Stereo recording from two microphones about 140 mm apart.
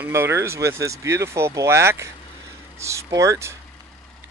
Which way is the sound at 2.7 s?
20° right (ahead or behind).